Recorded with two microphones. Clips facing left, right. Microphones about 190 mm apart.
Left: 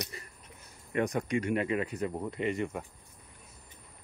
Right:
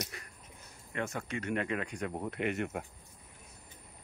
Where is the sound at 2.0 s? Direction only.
70° right (ahead or behind).